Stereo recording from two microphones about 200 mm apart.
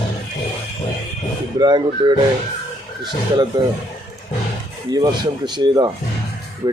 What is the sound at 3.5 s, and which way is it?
Speech, 20° right (ahead or behind).